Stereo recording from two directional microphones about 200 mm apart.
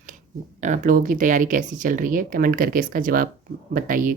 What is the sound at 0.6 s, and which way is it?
Speech, 35° right (ahead or behind).